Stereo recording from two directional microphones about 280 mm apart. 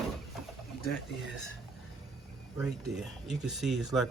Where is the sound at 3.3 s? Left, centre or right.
Centre.